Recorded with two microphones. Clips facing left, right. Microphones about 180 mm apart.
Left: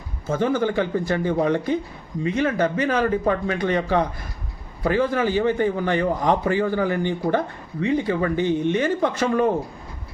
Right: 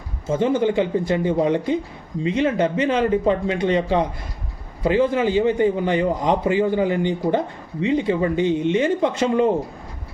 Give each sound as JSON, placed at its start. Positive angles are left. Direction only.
{"t": 0.3, "sound": "a man's voice", "side_deg": -20}